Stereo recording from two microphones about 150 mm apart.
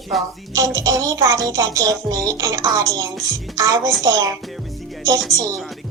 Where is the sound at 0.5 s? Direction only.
20° right (ahead or behind).